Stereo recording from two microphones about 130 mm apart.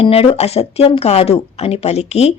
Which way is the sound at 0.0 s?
45° left (ahead or behind).